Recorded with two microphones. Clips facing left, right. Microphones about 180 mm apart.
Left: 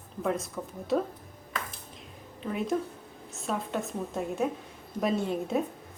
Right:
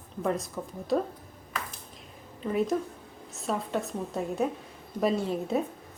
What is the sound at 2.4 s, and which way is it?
A woman's voice, centre (ahead or behind).